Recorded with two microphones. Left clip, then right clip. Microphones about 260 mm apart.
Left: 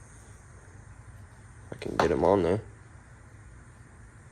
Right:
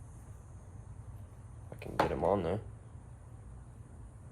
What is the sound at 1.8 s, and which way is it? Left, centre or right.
Speech, left.